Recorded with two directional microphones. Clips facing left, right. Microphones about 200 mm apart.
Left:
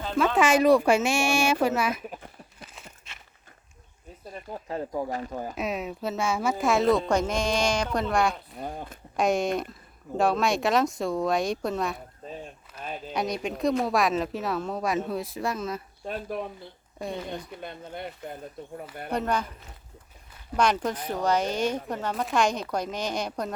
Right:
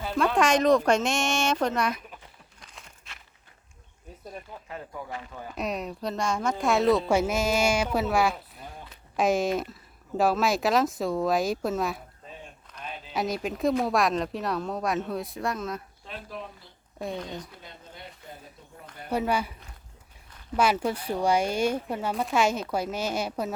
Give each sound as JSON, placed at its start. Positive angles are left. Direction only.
{"t": 0.3, "sound": "speech", "side_deg": 5}
{"t": 2.0, "sound": "a sound", "side_deg": 45}
{"t": 2.6, "sound": "a sound", "side_deg": 5}
{"t": 4.4, "sound": "speech", "side_deg": 40}
{"t": 5.5, "sound": "speech", "side_deg": 0}
{"t": 8.5, "sound": "speech", "side_deg": 50}
{"t": 9.1, "sound": "speech", "side_deg": 0}
{"t": 12.8, "sound": "a sound", "side_deg": 45}
{"t": 13.1, "sound": "speech", "side_deg": 0}
{"t": 16.0, "sound": "speech", "side_deg": 50}
{"t": 17.0, "sound": "speech", "side_deg": 0}
{"t": 17.2, "sound": "speech", "side_deg": 60}
{"t": 19.1, "sound": "speech", "side_deg": -10}
{"t": 20.6, "sound": "speech", "side_deg": -5}